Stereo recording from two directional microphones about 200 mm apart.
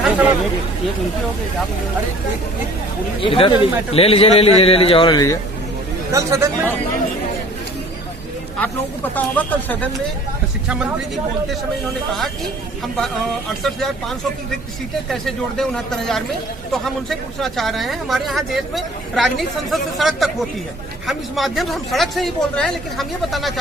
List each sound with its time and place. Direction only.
3.2 s a man's voice: 25° left (ahead or behind)
6.1 s speech: 15° right (ahead or behind)
9.1 s speech: 10° left (ahead or behind)
13.0 s speech: centre (ahead or behind)